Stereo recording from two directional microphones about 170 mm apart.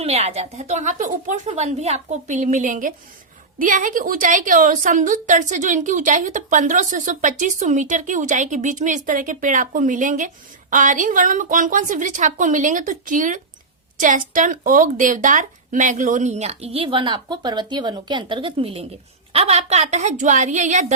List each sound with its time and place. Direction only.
0.0 s a woman's voice: 35° right (ahead or behind)